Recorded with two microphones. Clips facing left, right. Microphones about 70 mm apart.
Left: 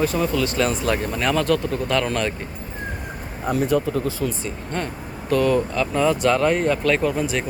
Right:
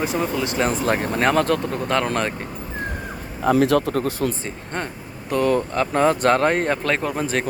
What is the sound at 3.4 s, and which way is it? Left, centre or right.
Speech, right.